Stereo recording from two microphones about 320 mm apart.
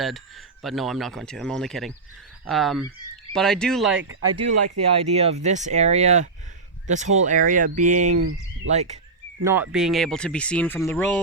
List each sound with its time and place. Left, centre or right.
0.6 s speech: centre
4.1 s speech: right
5.1 s speech: centre
9.4 s speech: centre